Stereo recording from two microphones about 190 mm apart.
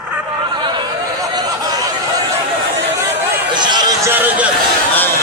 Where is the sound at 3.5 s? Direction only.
25° right (ahead or behind).